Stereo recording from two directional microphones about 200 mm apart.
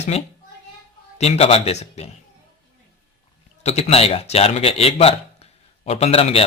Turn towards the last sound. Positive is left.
turn(degrees=30)  # may be behind; listen again after turning